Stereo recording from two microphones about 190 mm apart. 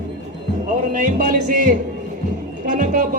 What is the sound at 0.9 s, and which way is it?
Speech, 45° right (ahead or behind).